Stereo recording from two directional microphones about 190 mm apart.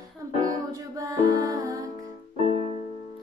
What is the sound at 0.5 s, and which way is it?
Music, 20° right (ahead or behind).